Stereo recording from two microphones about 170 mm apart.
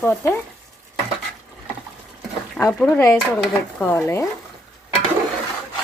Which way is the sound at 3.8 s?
15° left (ahead or behind).